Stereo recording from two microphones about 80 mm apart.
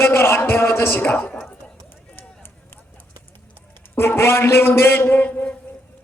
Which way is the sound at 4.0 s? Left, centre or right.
Left.